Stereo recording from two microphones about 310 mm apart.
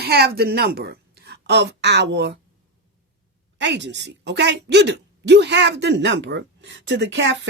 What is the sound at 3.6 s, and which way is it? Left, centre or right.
A woman's voice, right.